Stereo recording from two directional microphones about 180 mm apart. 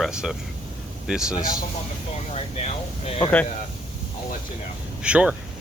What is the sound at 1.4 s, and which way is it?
Speech, 50° left (ahead or behind).